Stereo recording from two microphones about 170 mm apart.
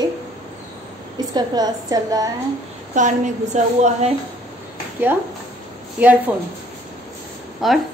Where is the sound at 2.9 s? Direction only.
45° right (ahead or behind).